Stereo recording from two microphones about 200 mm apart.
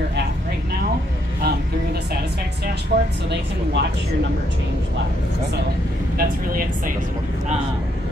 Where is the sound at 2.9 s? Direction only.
50° right (ahead or behind).